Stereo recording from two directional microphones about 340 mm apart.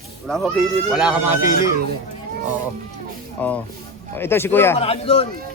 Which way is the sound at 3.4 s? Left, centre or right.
Centre.